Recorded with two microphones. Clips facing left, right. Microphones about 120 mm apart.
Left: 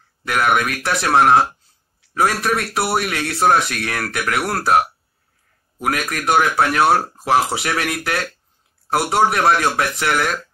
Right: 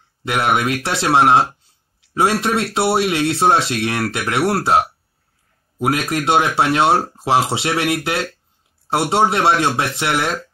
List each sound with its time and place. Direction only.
0.2 s speech: 25° right (ahead or behind)